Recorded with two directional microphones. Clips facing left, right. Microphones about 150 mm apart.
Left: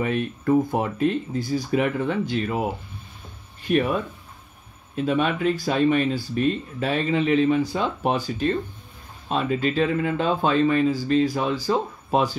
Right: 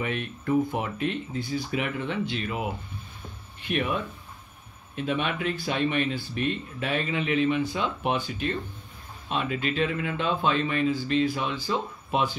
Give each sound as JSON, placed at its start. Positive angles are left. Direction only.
{"t": 0.0, "sound": "speech", "side_deg": 40}